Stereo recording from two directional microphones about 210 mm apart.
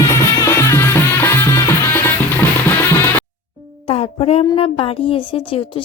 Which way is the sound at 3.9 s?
30° left (ahead or behind).